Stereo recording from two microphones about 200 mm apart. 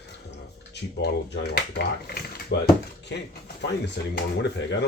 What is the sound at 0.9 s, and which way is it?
Speech, 55° left (ahead or behind).